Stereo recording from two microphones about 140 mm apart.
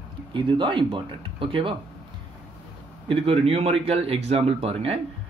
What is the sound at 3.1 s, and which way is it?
Speech, 45° right (ahead or behind).